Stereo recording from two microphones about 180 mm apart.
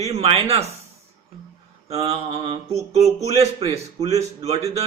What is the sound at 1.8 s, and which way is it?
Mantra, 35° right (ahead or behind).